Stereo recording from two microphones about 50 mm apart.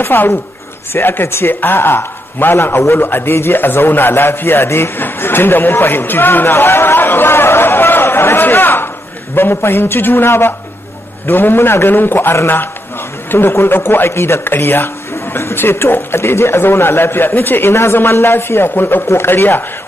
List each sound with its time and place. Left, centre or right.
0.0 s a woman's voice: left
1.5 s a man's voice: left
4.6 s a man's voice: left